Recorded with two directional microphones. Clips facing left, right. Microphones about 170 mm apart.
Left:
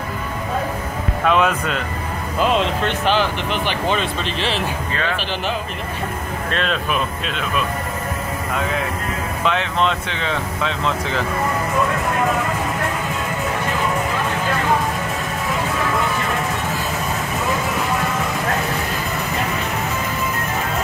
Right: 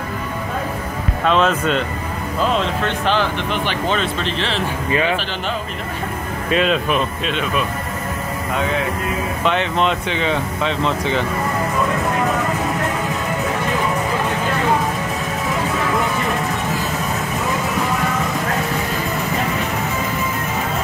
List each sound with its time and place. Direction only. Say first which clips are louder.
1.2 s speech: right 1 dB; 5° left (ahead or behind)
6.5 s speech: right 5 dB; 5° right (ahead or behind)
9.4 s speech: right 1 dB; centre (ahead or behind)